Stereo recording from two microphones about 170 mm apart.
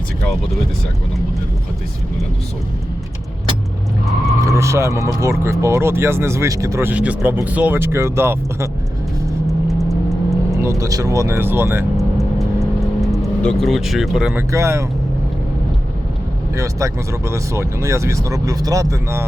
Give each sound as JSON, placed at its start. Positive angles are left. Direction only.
{"t": 4.4, "sound": "speech", "side_deg": -15}
{"t": 9.5, "sound": "vehicle", "side_deg": 0}
{"t": 10.6, "sound": "speech", "side_deg": -15}
{"t": 11.9, "sound": "vehicle", "side_deg": 0}
{"t": 13.4, "sound": "speech", "side_deg": 5}
{"t": 14.5, "sound": "speech", "side_deg": -15}
{"t": 16.6, "sound": "speech", "side_deg": -15}